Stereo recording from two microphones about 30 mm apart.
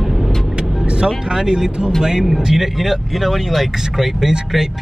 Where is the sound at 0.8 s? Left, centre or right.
Right.